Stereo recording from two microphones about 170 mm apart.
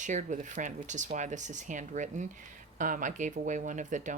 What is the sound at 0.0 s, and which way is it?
Speech, 45° right (ahead or behind).